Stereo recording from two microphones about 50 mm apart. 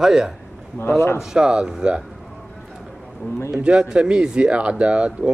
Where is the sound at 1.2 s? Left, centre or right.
Centre.